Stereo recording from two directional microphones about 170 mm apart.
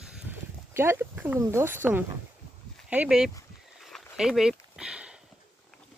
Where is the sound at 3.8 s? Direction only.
Centre (ahead or behind).